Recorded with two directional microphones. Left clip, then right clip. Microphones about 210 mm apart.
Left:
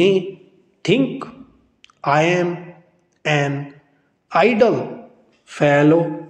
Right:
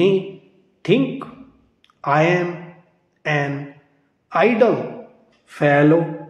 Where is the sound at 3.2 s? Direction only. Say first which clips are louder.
Left 2 dB; 20° left (ahead or behind).